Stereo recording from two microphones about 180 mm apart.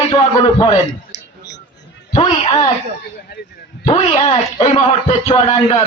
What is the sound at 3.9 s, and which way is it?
A man's voice, 35° left (ahead or behind).